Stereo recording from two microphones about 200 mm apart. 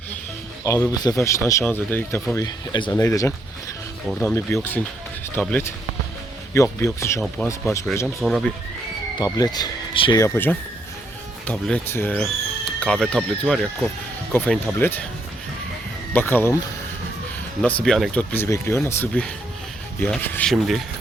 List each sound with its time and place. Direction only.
0.6 s speech: 15° left (ahead or behind)
7.4 s speech: 5° left (ahead or behind)
9.1 s speech: 20° left (ahead or behind)
16.1 s speech: 10° left (ahead or behind)
17.8 s speech: 5° left (ahead or behind)